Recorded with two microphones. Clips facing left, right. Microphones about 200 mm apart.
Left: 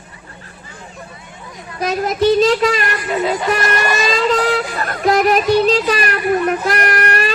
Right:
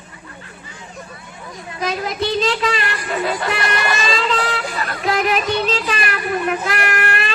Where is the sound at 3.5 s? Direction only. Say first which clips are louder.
Left 4 dB; 45° left (ahead or behind).